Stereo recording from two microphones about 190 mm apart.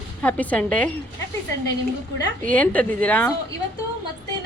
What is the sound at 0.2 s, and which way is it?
Speech, 10° left (ahead or behind).